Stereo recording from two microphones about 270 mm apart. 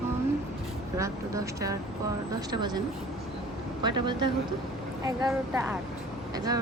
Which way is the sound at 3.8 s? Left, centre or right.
Centre.